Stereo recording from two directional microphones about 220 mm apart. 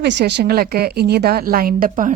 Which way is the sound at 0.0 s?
50° right (ahead or behind).